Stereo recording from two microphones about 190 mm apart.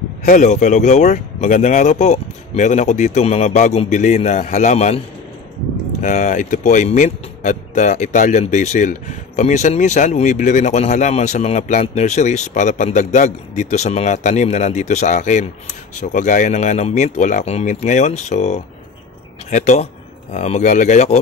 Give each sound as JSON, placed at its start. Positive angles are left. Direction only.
{"t": 0.2, "sound": "speech", "side_deg": 40}